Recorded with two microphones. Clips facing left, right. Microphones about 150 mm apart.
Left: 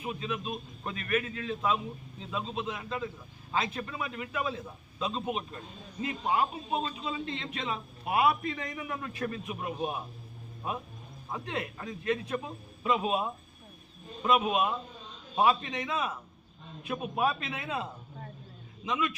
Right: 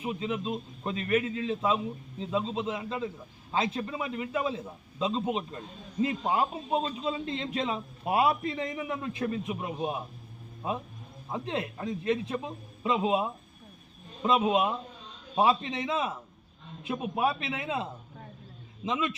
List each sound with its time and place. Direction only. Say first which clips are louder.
0.0 s a man's voice: right 3 dB; 25° right (ahead or behind)
11.3 s a man's voice: right 3 dB; 25° right (ahead or behind)
18.9 s a man's voice: right 1 dB; 25° right (ahead or behind)